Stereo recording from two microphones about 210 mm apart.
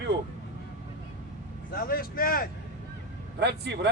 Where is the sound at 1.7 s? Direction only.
45° left (ahead or behind).